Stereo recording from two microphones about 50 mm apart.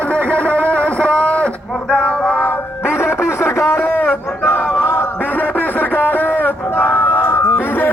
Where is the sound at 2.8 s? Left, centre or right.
Left.